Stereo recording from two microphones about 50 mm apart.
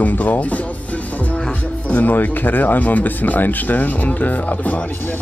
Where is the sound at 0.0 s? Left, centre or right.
Left.